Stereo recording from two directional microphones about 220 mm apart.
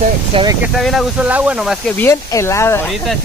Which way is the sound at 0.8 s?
Centre (ahead or behind).